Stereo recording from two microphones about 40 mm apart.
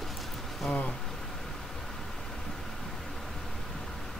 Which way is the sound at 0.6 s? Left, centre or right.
Centre.